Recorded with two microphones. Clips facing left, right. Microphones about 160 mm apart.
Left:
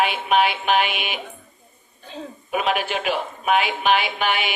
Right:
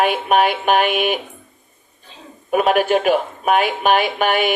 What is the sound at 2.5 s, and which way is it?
A woman's voice, 45° right (ahead or behind).